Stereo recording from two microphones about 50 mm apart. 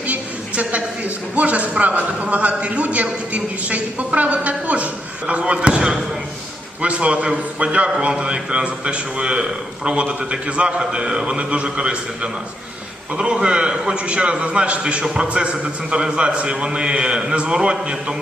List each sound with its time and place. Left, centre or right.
0.1 s a woman's voice: right
5.7 s speech: centre
6.8 s a man's voice: right